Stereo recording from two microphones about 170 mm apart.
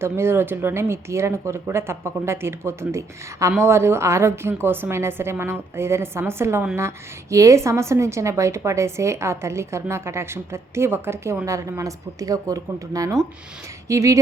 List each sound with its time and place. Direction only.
0.0 s a woman's voice: 15° right (ahead or behind)